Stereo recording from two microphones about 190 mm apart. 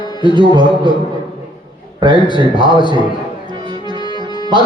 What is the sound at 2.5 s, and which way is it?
Music, 25° left (ahead or behind).